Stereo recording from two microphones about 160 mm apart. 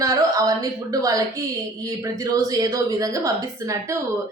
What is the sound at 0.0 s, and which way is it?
Speech, 20° right (ahead or behind).